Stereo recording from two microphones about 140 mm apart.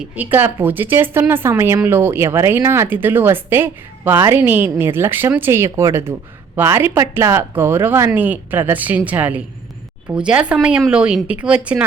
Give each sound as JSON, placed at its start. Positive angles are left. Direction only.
{"t": 0.0, "sound": "a woman's voice", "side_deg": -10}